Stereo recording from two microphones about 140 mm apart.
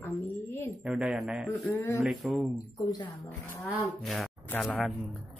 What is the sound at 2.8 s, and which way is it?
Speech, 25° left (ahead or behind).